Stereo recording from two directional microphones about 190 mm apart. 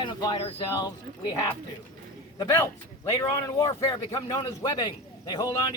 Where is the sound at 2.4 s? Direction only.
20° left (ahead or behind).